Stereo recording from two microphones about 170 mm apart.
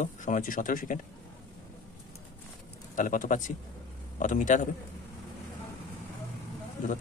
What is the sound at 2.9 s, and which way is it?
Speech, 50° left (ahead or behind).